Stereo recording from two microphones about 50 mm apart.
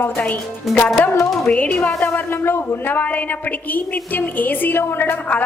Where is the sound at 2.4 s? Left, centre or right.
Left.